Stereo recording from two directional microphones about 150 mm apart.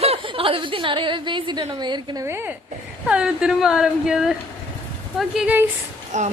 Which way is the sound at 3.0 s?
5° right (ahead or behind).